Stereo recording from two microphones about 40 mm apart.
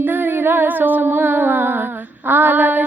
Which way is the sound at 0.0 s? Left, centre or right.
Right.